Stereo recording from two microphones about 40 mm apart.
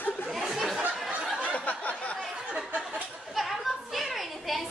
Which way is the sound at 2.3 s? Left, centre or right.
Right.